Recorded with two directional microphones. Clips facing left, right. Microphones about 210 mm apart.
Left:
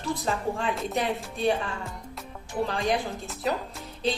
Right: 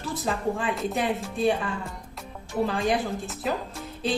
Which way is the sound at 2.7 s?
Centre (ahead or behind).